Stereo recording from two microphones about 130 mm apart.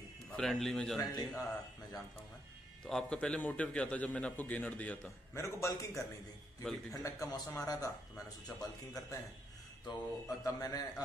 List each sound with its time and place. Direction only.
0.4 s speech: 5° left (ahead or behind)
0.9 s a man's voice: 30° left (ahead or behind)
2.8 s a man's voice: 5° left (ahead or behind)
5.3 s speech: 20° left (ahead or behind)